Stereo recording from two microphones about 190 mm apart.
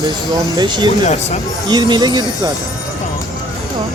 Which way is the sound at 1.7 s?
20° right (ahead or behind).